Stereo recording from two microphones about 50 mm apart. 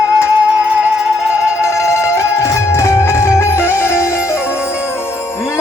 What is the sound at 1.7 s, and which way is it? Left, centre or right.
Music, left.